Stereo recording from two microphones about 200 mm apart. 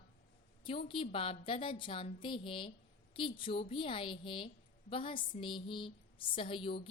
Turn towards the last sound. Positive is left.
turn(degrees=25)  # may be behind; listen again after turning